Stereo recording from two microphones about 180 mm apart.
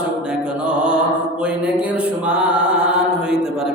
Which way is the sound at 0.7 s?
5° right (ahead or behind).